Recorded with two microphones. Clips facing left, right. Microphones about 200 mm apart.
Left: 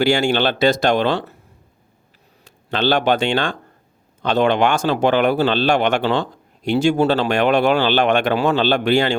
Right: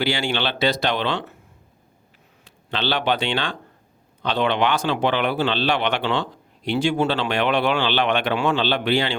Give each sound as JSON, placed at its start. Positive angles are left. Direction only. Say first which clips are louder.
{"t": 0.0, "sound": "speech", "louder": "left 7 dB", "side_deg": 45}
{"t": 2.4, "sound": "speech", "louder": "left 6 dB", "side_deg": 45}